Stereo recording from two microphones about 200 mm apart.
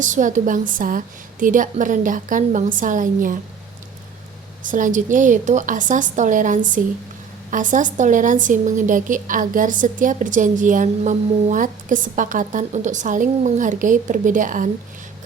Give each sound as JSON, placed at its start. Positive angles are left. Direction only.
{"t": 0.0, "sound": "a woman's voice", "side_deg": -40}
{"t": 4.6, "sound": "a woman's voice", "side_deg": -40}